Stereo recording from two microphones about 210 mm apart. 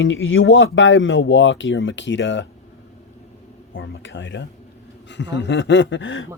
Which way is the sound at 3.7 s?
60° left (ahead or behind).